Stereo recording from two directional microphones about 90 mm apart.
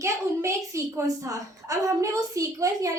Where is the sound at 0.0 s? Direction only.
35° right (ahead or behind).